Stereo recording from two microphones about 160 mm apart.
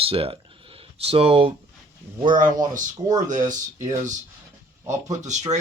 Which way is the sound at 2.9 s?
25° right (ahead or behind).